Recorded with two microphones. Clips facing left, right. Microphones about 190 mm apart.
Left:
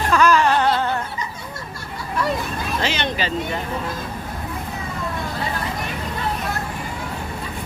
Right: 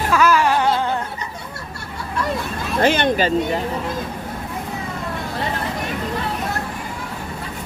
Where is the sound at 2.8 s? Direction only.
50° right (ahead or behind).